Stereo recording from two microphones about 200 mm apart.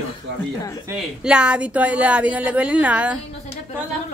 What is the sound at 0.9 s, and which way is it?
Speech, 5° right (ahead or behind).